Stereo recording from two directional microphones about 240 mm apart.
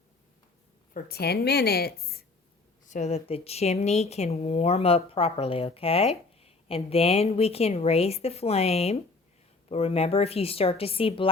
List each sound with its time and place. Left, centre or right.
0.9 s a woman's voice: left
2.8 s speech: left